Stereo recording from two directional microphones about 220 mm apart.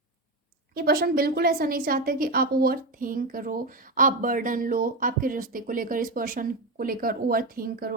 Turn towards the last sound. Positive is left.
turn(degrees=-40)  # may be behind; listen again after turning